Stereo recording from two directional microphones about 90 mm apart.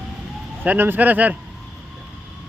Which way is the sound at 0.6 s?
20° right (ahead or behind).